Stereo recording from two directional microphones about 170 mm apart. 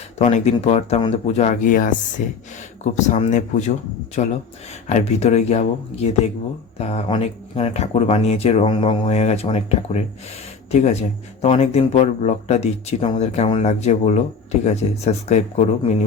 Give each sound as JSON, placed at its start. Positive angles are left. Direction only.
{"t": 0.2, "sound": "speech", "side_deg": 40}